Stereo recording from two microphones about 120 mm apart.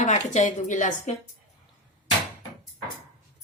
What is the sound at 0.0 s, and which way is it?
Speech, 80° left.